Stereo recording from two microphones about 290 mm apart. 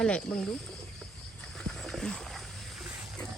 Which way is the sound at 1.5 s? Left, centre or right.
Centre.